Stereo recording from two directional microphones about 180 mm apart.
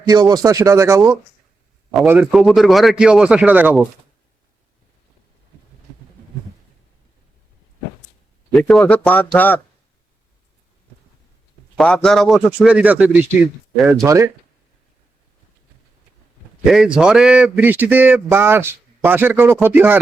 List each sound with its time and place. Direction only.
0.1 s speech: 20° right (ahead or behind)
1.9 s a man's voice: 5° right (ahead or behind)
8.5 s a man's voice: centre (ahead or behind)
11.8 s a man's voice: 5° left (ahead or behind); by 14.3 s 15° right (ahead or behind)
16.6 s speech: 5° right (ahead or behind)